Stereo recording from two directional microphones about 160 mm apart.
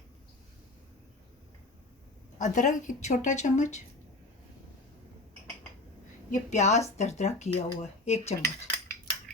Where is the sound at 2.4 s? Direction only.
50° left (ahead or behind).